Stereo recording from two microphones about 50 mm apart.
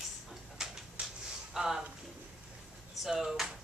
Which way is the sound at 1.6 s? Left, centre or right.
Centre.